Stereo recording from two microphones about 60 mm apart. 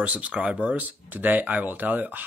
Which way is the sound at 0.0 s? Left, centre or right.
Right.